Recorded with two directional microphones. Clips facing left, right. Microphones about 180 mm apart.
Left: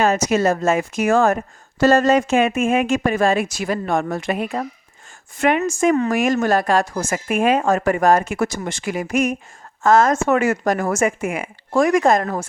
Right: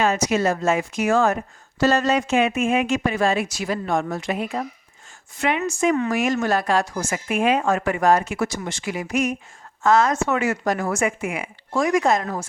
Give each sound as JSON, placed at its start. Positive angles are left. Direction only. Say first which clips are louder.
{"t": 0.0, "sound": "a woman's voice", "louder": "left 3 dB", "side_deg": 45}